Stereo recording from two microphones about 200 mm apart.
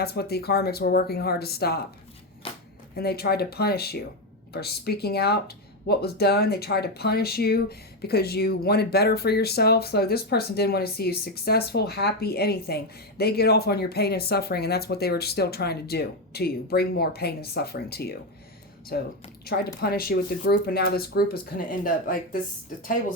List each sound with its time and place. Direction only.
0.0 s speech: 50° left (ahead or behind)
2.4 s a sound: 30° left (ahead or behind)
2.9 s speech: 50° left (ahead or behind)